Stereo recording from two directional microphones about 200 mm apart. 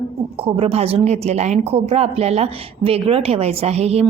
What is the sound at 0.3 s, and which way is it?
A woman's voice, 30° right (ahead or behind).